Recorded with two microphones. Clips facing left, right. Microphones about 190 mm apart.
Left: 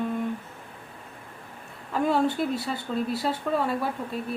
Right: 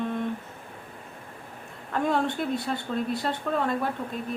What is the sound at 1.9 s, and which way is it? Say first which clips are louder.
Speech: left 2 dB; 5° left (ahead or behind).